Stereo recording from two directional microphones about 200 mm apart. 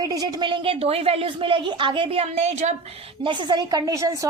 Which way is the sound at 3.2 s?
25° right (ahead or behind).